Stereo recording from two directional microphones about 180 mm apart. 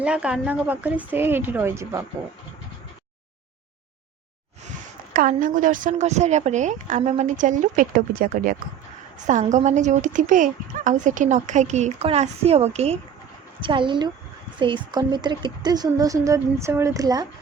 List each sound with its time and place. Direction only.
0.0 s speech: 5° right (ahead or behind)
5.1 s a woman's voice: 50° right (ahead or behind); by 17.2 s 20° right (ahead or behind)